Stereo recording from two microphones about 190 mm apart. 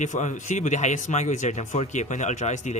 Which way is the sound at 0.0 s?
40° left (ahead or behind).